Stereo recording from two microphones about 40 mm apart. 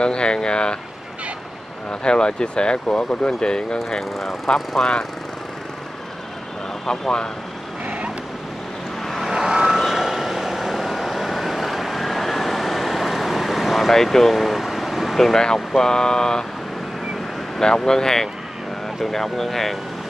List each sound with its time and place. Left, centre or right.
0.0 s speech: left
1.9 s speech: left
6.9 s speech: left
7.8 s vehicle: right
9.3 s vehicle: centre
15.1 s speech: centre
17.6 s speech: centre